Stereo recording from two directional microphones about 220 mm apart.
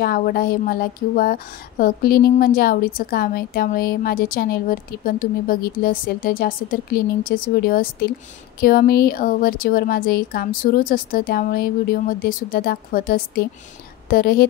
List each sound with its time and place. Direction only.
0.0 s a woman's voice: 40° left (ahead or behind)